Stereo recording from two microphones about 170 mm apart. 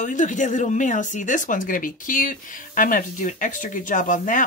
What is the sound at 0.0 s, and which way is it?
Speech, 45° left (ahead or behind).